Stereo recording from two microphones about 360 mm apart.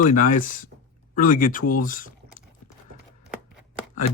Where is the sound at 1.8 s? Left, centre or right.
Left.